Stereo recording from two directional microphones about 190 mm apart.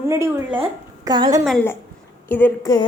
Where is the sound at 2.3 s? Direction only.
10° left (ahead or behind).